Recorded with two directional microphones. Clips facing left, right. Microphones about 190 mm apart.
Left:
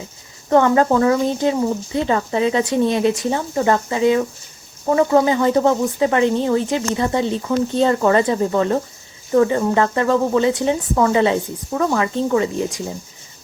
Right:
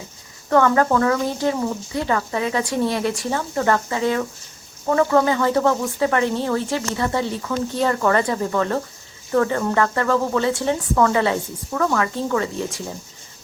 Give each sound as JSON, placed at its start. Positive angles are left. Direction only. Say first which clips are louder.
{"t": 0.5, "sound": "speech", "louder": "left 3 dB", "side_deg": 20}